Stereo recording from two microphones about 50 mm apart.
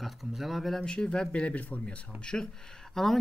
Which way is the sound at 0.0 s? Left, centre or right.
Centre.